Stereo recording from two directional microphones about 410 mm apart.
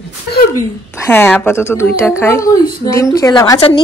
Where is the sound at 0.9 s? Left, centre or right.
Centre.